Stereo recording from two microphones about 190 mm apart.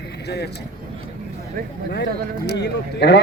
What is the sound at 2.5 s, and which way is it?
Speech, 60° left (ahead or behind).